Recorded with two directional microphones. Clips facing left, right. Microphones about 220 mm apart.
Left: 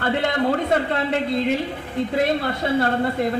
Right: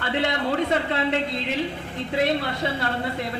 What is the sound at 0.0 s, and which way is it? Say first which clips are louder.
A woman's voice: left 4 dB; 45° left (ahead or behind).